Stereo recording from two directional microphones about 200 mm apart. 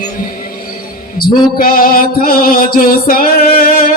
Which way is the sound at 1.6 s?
45° left (ahead or behind).